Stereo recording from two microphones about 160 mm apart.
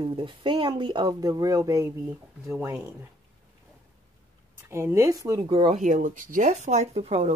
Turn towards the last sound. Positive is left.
turn(degrees=-40)  # may be behind; listen again after turning